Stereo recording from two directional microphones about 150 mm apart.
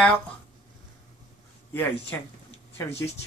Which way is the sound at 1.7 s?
15° left (ahead or behind).